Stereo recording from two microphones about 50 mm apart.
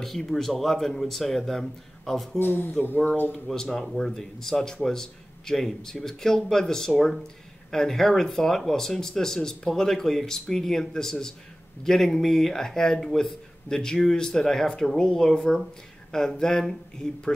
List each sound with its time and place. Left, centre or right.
0.0 s speech: centre
2.3 s speech: left
3.6 s speech: centre